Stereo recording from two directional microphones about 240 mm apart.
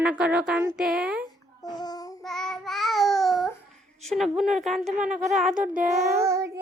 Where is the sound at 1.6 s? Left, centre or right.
Centre.